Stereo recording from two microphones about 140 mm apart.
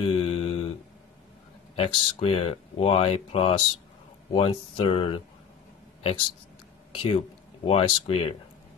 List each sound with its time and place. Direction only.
0.0 s mantra: 45° left (ahead or behind)
1.8 s speech: 45° left (ahead or behind)
6.9 s speech: 45° left (ahead or behind)